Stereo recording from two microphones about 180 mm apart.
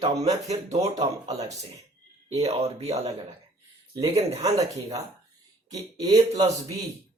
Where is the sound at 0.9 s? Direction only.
20° right (ahead or behind).